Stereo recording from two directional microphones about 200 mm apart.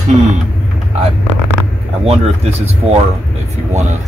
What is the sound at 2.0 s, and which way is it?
Speech, 30° right (ahead or behind).